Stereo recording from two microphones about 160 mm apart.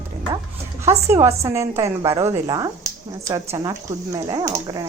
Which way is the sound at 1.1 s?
15° right (ahead or behind).